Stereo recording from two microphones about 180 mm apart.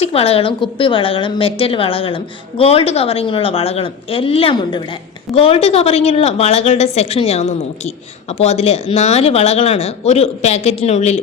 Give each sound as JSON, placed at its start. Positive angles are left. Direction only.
{"t": 0.0, "sound": "a woman's voice", "side_deg": 35}